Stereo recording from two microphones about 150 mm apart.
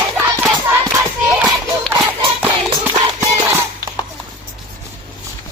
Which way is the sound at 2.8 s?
15° right (ahead or behind).